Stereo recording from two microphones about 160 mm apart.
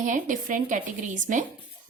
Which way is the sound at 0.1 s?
55° right (ahead or behind).